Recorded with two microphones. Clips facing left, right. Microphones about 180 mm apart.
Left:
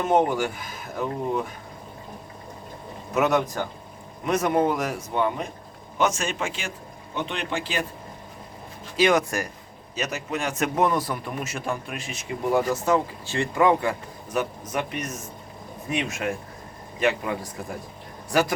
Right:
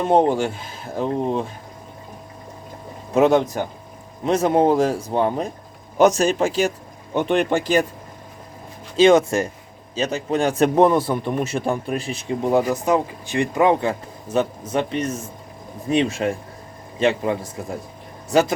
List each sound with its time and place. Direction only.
0.0 s a man's voice: 30° right (ahead or behind)
3.2 s a man's voice: 25° right (ahead or behind); by 7.9 s 45° right (ahead or behind)
9.0 s a man's voice: 25° right (ahead or behind)